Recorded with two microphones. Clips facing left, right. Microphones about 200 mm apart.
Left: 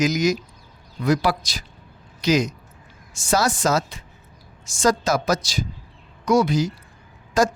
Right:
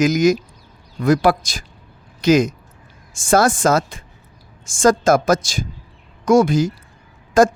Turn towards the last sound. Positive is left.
turn(degrees=-50)  # may be behind; listen again after turning